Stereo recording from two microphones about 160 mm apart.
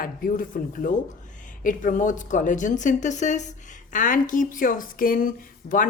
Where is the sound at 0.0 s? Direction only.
60° left (ahead or behind).